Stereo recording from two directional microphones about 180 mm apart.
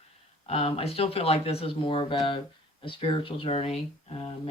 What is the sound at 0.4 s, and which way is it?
Speech, 35° left (ahead or behind).